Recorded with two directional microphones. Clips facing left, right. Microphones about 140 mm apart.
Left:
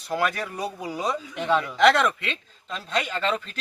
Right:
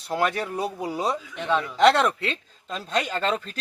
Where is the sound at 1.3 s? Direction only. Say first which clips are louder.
Left 1 dB; 5° left (ahead or behind).